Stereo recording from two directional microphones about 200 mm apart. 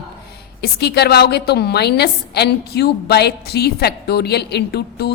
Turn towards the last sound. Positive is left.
turn(degrees=55)  # may be behind; listen again after turning